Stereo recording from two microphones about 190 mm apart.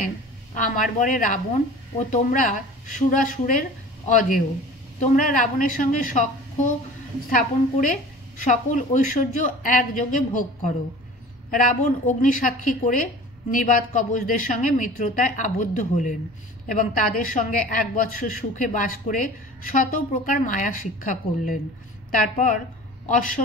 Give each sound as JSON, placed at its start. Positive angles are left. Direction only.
{"t": 0.6, "sound": "a woman's voice", "side_deg": 45}
{"t": 7.2, "sound": "a woman's voice", "side_deg": 45}